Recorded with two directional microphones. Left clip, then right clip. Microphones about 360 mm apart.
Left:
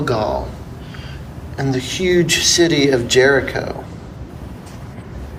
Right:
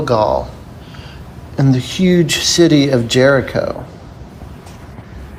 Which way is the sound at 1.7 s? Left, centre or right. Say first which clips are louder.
Even; right.